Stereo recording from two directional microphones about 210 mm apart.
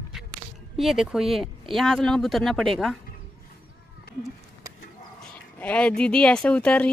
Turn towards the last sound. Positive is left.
turn(degrees=5)  # may be behind; listen again after turning